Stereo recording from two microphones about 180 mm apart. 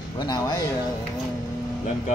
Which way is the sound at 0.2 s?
20° left (ahead or behind).